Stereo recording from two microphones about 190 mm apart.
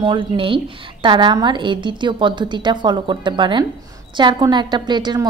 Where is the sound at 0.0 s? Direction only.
25° right (ahead or behind).